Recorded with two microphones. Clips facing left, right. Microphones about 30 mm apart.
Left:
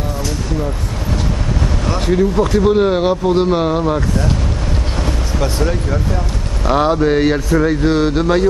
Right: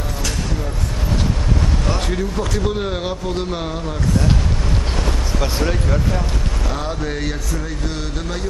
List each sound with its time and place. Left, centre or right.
1.9 s speech: centre
5.4 s speech: centre
6.7 s speech: left